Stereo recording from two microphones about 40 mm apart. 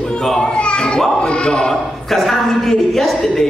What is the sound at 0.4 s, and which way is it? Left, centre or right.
Children playing, left.